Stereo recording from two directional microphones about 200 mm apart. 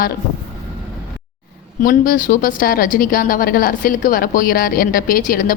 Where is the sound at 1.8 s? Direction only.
45° left (ahead or behind).